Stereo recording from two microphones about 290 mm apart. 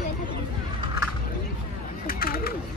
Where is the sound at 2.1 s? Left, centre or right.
Left.